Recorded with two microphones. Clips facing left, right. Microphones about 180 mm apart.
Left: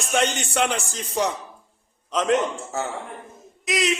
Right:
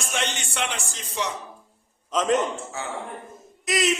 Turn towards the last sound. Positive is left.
turn(degrees=0)  # may be behind; listen again after turning